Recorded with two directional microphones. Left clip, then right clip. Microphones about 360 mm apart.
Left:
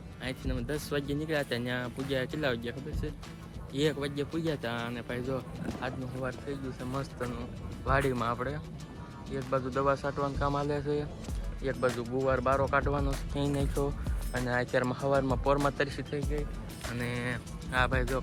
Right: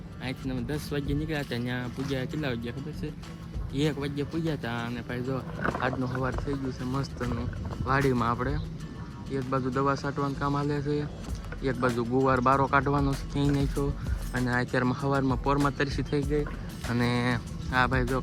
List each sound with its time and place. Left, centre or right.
0.3 s speech: centre